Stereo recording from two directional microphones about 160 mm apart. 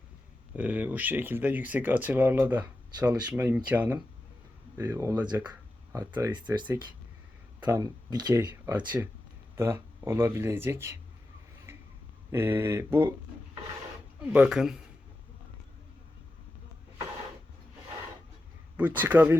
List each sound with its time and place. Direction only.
0.5 s speech: 10° right (ahead or behind)
5.4 s a sound: 25° right (ahead or behind)
6.0 s speech: 10° right (ahead or behind)
7.6 s speech: 20° right (ahead or behind)
8.7 s speech: 10° right (ahead or behind)
12.3 s speech: 15° right (ahead or behind)
14.2 s speech: 5° right (ahead or behind)
18.8 s speech: 10° right (ahead or behind)